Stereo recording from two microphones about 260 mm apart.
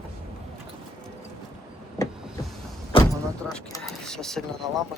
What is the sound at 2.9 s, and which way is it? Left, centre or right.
Vehicle, left.